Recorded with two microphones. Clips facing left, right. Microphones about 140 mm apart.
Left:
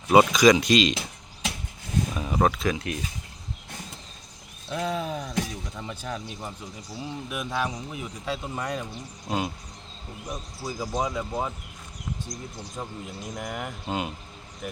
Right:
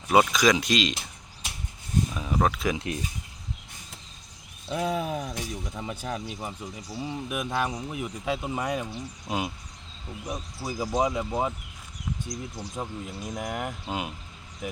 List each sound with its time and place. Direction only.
0.1 s speech: centre (ahead or behind)
2.1 s a sound: 5° left (ahead or behind)
2.7 s speech: 25° right (ahead or behind)
4.7 s speech: 10° right (ahead or behind)